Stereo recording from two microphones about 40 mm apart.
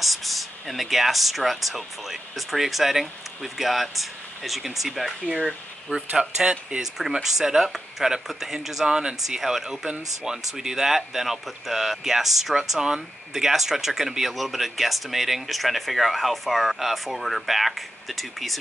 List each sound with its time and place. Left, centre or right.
0.0 s speech: centre
5.3 s speech: centre
6.8 s speech: centre